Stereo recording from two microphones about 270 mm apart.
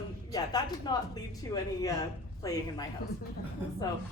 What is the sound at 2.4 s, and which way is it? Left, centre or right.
Speech, centre.